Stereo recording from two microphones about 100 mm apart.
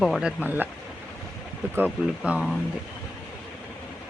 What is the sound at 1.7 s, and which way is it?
Speech, 15° right (ahead or behind).